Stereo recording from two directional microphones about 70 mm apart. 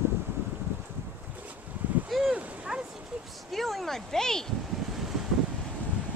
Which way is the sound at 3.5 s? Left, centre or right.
Centre.